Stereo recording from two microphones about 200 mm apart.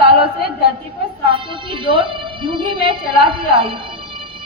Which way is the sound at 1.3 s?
25° right (ahead or behind).